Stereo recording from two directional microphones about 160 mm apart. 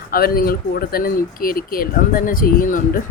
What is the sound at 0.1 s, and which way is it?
Speech, 70° left (ahead or behind).